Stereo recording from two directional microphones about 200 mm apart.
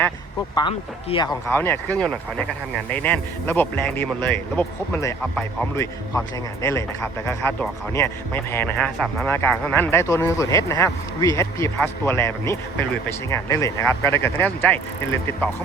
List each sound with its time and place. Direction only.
0.5 s speech: 25° left (ahead or behind)
1.5 s speech: 10° left (ahead or behind)